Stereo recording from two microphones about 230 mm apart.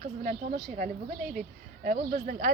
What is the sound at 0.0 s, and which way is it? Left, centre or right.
Speech, right.